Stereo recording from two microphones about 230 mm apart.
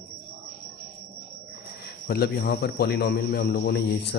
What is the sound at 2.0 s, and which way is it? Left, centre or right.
A man's voice, left.